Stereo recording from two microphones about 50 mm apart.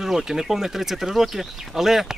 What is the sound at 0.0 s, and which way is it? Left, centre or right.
Speech, centre.